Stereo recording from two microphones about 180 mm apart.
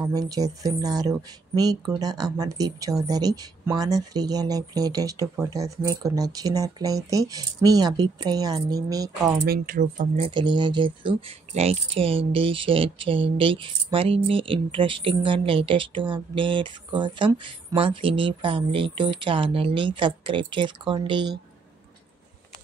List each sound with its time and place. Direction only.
0.0 s speech: 20° right (ahead or behind)
9.5 s speech: 50° right (ahead or behind); by 21.3 s 25° right (ahead or behind)